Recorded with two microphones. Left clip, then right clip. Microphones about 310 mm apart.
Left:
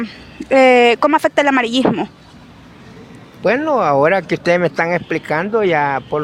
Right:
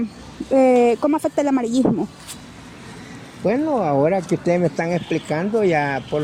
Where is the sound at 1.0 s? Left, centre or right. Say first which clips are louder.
Left 6 dB; left.